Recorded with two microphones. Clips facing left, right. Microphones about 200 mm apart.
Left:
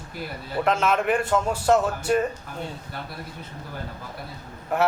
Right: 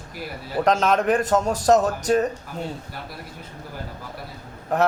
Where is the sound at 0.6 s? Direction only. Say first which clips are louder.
Right 3 dB; 35° right (ahead or behind).